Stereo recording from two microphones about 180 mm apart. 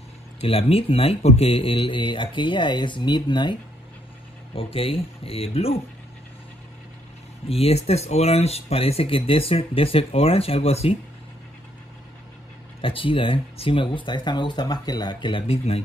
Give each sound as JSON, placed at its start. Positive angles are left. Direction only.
{"t": 0.4, "sound": "a man's voice", "side_deg": 35}
{"t": 4.6, "sound": "speech", "side_deg": 30}
{"t": 7.4, "sound": "speech", "side_deg": 35}
{"t": 12.8, "sound": "a man's voice", "side_deg": 30}